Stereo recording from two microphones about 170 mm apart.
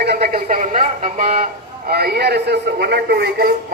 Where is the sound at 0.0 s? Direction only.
70° right (ahead or behind); by 1.5 s 45° right (ahead or behind).